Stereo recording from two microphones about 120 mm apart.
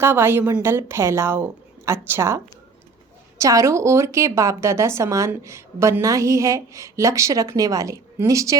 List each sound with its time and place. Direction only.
0.0 s a woman's voice: 20° right (ahead or behind)
3.4 s a woman's voice: 25° right (ahead or behind)